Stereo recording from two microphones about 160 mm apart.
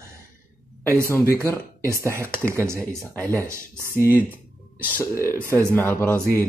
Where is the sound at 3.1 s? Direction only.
15° left (ahead or behind).